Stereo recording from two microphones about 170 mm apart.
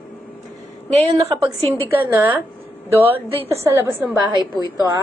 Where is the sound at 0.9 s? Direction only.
35° right (ahead or behind).